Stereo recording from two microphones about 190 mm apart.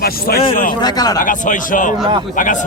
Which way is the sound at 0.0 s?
55° left (ahead or behind).